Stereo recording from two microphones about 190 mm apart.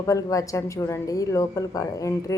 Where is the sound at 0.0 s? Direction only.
15° left (ahead or behind).